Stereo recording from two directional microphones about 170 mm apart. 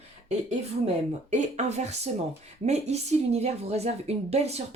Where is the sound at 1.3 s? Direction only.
40° right (ahead or behind).